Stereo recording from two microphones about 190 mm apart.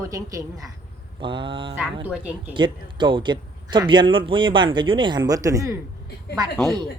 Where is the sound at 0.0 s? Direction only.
15° right (ahead or behind).